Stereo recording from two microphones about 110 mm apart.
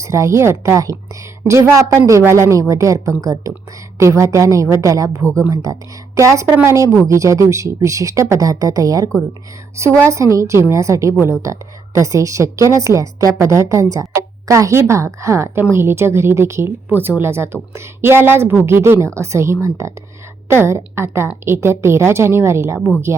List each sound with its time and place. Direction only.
0.0 s speech: 30° right (ahead or behind)